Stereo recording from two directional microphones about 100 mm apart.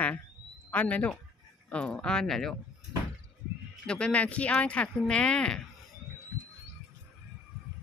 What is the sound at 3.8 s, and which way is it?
Speech, 10° left (ahead or behind).